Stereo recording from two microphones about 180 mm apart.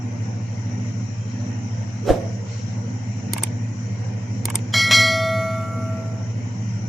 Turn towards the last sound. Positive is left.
turn(degrees=0)  # may be behind; listen again after turning